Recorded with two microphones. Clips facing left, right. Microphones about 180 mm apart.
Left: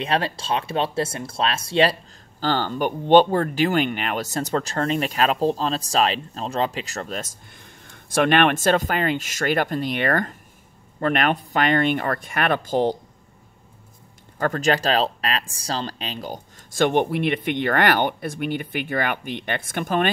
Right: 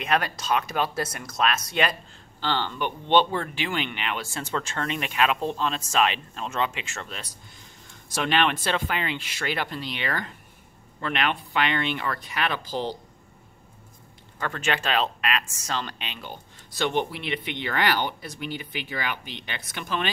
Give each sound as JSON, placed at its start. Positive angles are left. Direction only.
{"t": 0.0, "sound": "speech", "side_deg": 30}
{"t": 2.4, "sound": "speech", "side_deg": 45}
{"t": 14.4, "sound": "speech", "side_deg": 40}